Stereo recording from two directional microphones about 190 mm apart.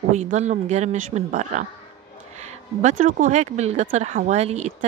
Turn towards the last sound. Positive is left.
turn(degrees=-35)  # may be behind; listen again after turning